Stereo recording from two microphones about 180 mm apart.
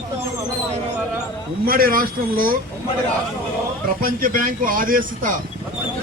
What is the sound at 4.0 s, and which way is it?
Speech, 50° right (ahead or behind).